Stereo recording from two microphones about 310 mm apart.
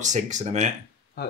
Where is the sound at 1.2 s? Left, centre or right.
Left.